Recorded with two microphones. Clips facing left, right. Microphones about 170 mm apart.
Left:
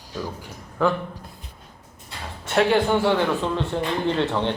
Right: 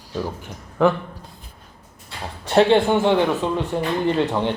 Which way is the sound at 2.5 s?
30° right (ahead or behind).